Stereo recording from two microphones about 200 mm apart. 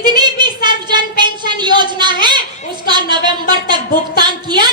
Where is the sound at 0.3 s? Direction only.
20° right (ahead or behind).